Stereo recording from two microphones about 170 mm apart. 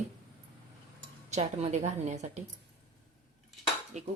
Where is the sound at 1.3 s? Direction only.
40° right (ahead or behind).